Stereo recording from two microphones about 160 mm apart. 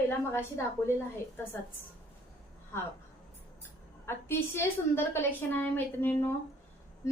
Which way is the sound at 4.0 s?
15° left (ahead or behind).